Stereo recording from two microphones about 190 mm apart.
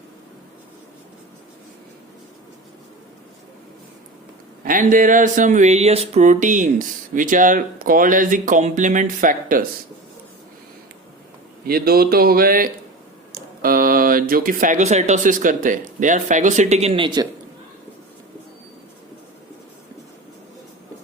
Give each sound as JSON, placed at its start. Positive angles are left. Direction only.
{"t": 4.6, "sound": "speech", "side_deg": -45}
{"t": 11.6, "sound": "speech", "side_deg": -55}